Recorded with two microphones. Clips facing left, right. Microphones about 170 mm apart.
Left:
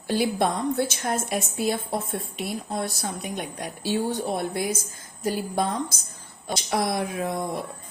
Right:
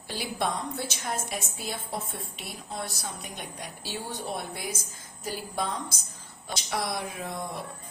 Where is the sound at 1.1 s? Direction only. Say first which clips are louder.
Left 7 dB; 55° left (ahead or behind).